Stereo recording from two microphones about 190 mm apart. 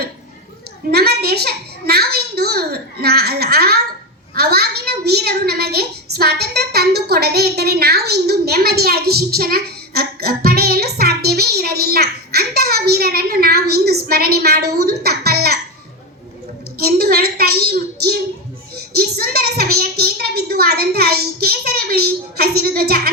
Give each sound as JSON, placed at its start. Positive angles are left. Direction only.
{"t": 0.9, "sound": "a sound", "side_deg": -55}
{"t": 4.4, "sound": "a child's voice", "side_deg": -55}
{"t": 16.7, "sound": "a woman's voice", "side_deg": -55}